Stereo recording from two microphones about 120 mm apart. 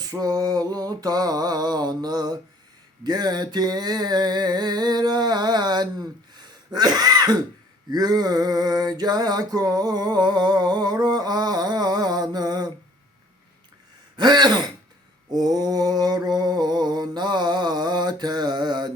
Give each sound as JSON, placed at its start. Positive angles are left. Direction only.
{"t": 0.1, "sound": "a sound", "side_deg": -30}
{"t": 14.2, "sound": "throat clearing", "side_deg": -35}
{"t": 15.3, "sound": "mantra", "side_deg": -35}